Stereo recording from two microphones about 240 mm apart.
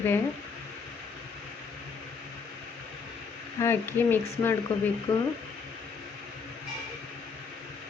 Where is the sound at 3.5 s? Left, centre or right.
Centre.